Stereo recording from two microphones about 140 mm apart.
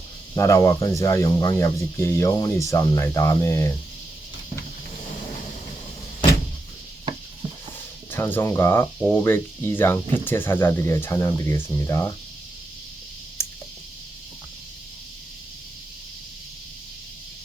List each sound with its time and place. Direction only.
0.3 s speech: 20° left (ahead or behind)
8.1 s speech: 15° left (ahead or behind)
13.4 s a sound: 20° left (ahead or behind)